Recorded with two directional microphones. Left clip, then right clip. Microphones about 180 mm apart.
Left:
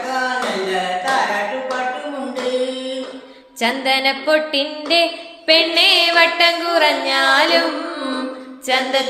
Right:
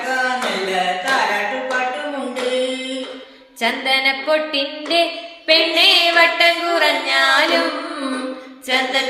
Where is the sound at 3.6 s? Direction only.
50° left (ahead or behind).